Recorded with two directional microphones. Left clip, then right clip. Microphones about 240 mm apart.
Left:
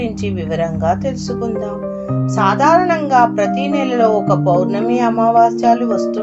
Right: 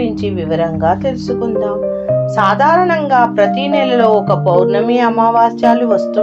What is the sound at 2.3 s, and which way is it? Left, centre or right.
A woman's voice, right.